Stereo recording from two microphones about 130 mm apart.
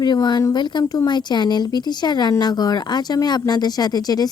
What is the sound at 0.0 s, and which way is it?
Speech, 35° left (ahead or behind).